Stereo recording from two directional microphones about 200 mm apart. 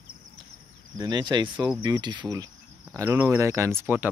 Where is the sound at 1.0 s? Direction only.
20° right (ahead or behind).